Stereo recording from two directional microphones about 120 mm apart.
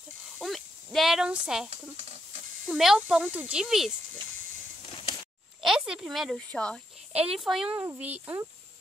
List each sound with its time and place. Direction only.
0.4 s a sound: centre (ahead or behind)
1.7 s speech: 60° right (ahead or behind)
2.7 s a child's voice: 5° right (ahead or behind)
5.6 s a child's voice: 5° right (ahead or behind)
7.2 s a child's voice: 5° right (ahead or behind)
7.7 s speech: 15° right (ahead or behind)